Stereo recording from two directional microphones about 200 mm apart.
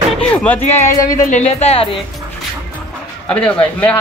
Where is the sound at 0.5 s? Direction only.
35° left (ahead or behind).